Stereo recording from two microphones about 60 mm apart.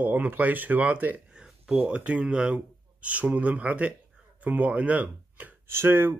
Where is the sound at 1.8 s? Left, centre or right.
Right.